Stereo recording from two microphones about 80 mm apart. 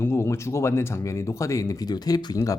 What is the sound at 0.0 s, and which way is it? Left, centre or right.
Speech, left.